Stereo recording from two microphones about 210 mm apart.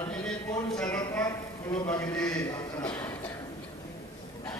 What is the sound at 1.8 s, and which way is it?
A man's voice, 10° left (ahead or behind).